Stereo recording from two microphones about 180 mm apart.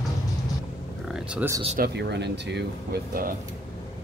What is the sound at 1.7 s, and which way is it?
Speech, 65° right (ahead or behind).